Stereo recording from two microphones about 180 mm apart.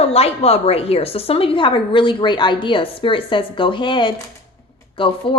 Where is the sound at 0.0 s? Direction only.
35° left (ahead or behind).